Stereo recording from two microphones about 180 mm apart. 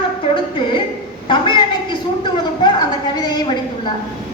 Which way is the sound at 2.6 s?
25° left (ahead or behind).